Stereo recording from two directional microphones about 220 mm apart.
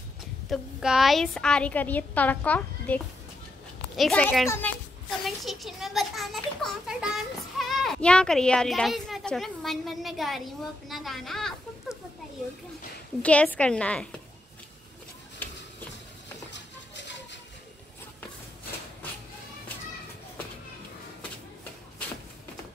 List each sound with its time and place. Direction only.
0.5 s a child's voice: centre (ahead or behind)
13.2 s a child's voice: 5° left (ahead or behind)
16.5 s a sound: 55° left (ahead or behind)